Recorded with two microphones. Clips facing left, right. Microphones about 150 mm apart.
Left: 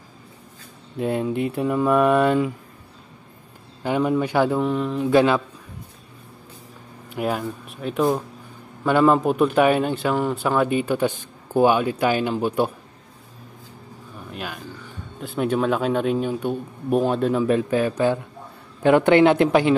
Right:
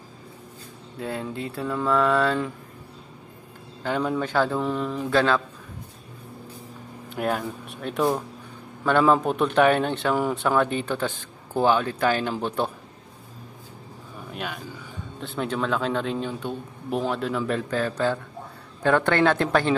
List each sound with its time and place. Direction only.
0.9 s a man's voice: 20° left (ahead or behind)
3.8 s a man's voice: 10° left (ahead or behind)
4.6 s speech: centre (ahead or behind)
5.1 s a man's voice: 15° left (ahead or behind)
7.1 s a man's voice: centre (ahead or behind)
14.3 s a sound: centre (ahead or behind)
15.1 s a man's voice: 10° left (ahead or behind)